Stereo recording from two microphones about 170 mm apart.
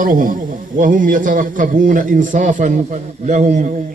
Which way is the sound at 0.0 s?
55° right (ahead or behind).